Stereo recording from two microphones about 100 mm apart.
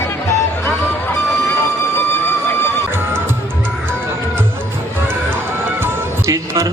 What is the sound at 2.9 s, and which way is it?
Music, 20° right (ahead or behind).